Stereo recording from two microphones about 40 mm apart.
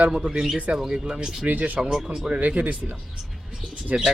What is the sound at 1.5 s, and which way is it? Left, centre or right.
Speech, right.